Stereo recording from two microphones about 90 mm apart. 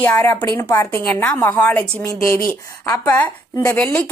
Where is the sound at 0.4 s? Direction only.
35° left (ahead or behind).